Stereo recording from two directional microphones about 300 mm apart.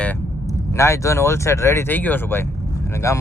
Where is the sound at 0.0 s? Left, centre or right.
Centre.